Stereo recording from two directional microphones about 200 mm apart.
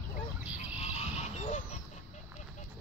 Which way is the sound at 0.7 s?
30° left (ahead or behind).